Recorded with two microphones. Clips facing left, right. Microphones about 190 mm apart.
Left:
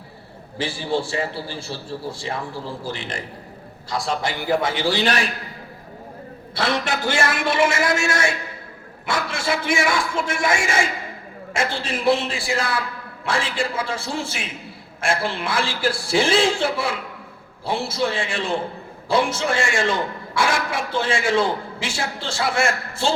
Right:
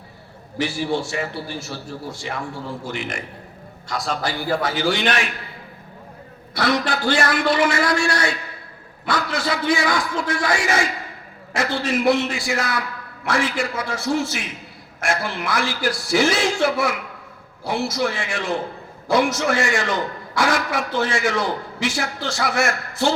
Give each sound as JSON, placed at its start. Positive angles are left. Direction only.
{"t": 0.6, "sound": "a man's voice", "side_deg": 30}
{"t": 6.5, "sound": "a sound", "side_deg": 25}
{"t": 6.8, "sound": "a man's voice", "side_deg": 25}